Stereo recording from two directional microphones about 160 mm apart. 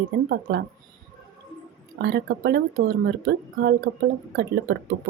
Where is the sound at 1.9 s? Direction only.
90° right.